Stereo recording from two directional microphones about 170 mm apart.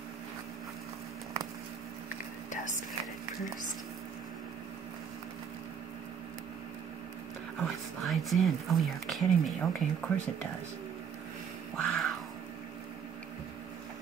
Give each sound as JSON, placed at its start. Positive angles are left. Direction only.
{"t": 2.5, "sound": "whispering", "side_deg": 50}
{"t": 7.6, "sound": "speech", "side_deg": 0}
{"t": 11.7, "sound": "a sound", "side_deg": 5}